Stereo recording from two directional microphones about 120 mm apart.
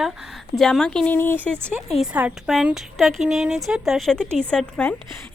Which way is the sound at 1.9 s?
5° right (ahead or behind).